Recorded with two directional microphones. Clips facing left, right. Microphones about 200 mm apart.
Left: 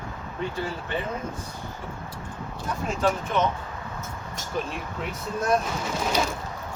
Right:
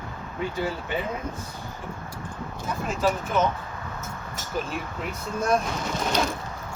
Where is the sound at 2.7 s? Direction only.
Centre (ahead or behind).